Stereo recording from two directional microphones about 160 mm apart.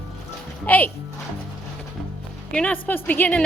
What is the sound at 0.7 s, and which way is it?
Speech, 10° left (ahead or behind).